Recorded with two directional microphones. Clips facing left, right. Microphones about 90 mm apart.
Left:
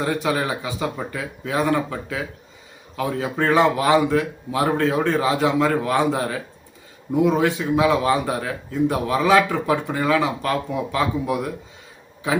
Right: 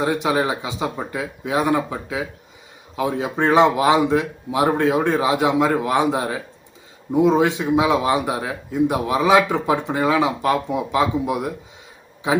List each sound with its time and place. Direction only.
0.0 s speech: 20° right (ahead or behind)